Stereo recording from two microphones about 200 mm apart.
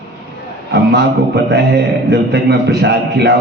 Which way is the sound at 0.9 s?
55° right (ahead or behind).